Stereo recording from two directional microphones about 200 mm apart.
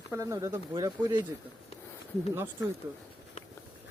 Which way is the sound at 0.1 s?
15° right (ahead or behind).